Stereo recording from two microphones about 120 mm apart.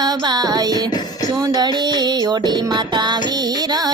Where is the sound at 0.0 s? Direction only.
35° right (ahead or behind).